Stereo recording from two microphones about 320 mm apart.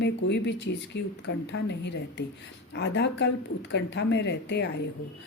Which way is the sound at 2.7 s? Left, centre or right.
Left.